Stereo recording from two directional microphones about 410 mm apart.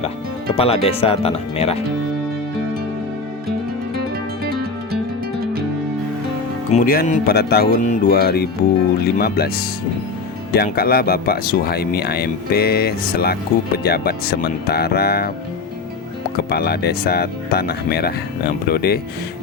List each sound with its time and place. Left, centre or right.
0.5 s speech: centre
6.7 s speech: centre
16.5 s speech: left